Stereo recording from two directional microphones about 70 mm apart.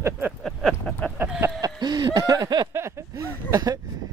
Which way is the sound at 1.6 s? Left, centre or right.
Right.